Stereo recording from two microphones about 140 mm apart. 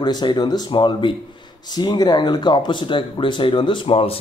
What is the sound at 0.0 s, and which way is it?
Speech, 30° left (ahead or behind).